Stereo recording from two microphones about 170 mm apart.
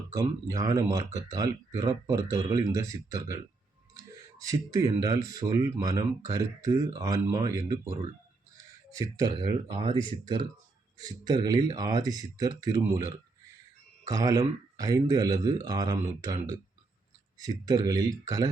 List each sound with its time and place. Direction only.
0.1 s speech: 20° right (ahead or behind)
4.4 s speech: 20° right (ahead or behind)
9.0 s speech: 25° right (ahead or behind)